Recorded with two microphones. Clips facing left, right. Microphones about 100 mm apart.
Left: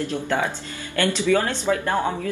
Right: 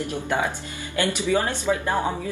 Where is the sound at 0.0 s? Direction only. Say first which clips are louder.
Left 1 dB; 15° right (ahead or behind).